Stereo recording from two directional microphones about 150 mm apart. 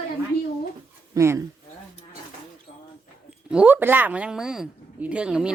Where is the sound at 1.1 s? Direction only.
20° right (ahead or behind).